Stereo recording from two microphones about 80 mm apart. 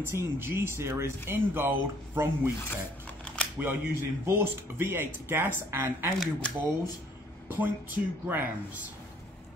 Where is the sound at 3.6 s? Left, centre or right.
Right.